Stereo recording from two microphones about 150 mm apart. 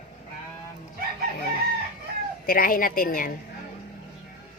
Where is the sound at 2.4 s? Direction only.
70° left (ahead or behind).